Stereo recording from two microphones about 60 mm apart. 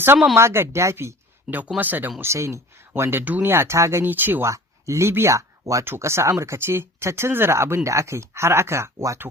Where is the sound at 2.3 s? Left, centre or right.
Right.